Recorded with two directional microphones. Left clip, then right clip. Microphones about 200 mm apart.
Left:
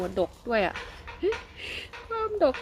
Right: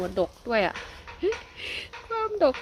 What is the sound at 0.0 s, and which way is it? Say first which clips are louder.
A woman's voice: right 1 dB; 25° right (ahead or behind).